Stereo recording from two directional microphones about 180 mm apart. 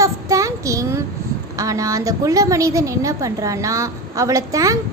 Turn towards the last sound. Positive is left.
turn(degrees=-20)  # may be behind; listen again after turning